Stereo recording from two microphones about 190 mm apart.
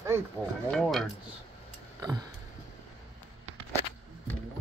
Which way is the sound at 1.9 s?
20° right (ahead or behind).